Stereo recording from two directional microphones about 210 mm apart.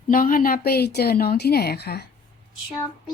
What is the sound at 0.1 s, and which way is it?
A woman's voice, 40° left (ahead or behind).